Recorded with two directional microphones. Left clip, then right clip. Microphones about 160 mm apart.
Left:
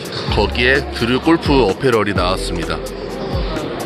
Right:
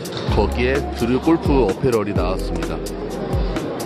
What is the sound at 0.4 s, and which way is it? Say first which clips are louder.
Speech: left 5 dB; 10° right (ahead or behind).